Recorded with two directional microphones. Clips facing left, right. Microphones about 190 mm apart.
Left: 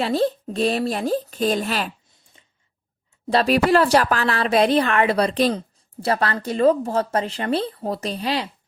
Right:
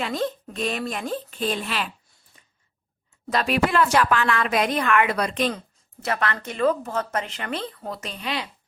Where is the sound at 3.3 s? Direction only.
35° left (ahead or behind).